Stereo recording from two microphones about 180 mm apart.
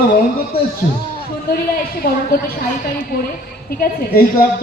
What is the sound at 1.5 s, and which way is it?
Speech, 55° left (ahead or behind).